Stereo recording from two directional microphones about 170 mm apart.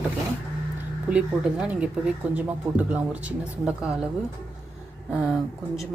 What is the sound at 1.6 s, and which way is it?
Speech, 5° right (ahead or behind).